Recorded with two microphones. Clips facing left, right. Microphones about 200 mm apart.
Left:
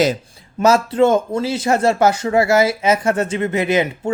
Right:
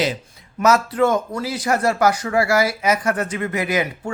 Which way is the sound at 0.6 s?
30° left (ahead or behind).